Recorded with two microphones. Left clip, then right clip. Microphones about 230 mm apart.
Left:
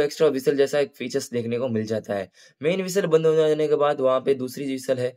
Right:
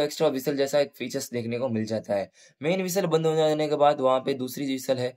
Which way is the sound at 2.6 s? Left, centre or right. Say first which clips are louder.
Left 3 dB; left.